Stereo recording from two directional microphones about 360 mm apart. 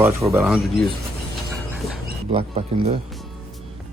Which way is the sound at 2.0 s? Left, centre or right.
Centre.